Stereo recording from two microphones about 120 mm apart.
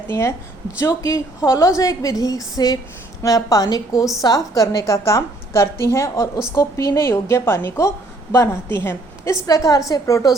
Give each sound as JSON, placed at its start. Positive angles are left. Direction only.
{"t": 0.1, "sound": "a woman's voice", "side_deg": 25}